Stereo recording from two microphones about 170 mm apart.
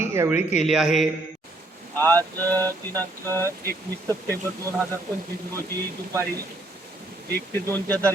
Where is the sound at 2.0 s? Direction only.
10° left (ahead or behind).